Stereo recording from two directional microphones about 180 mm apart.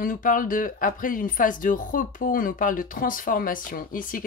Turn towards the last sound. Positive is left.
turn(degrees=50)  # may be behind; listen again after turning